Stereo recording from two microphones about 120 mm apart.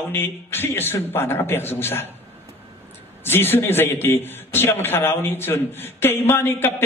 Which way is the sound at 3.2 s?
20° left (ahead or behind).